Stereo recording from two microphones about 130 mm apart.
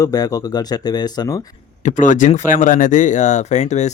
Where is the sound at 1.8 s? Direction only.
75° left (ahead or behind).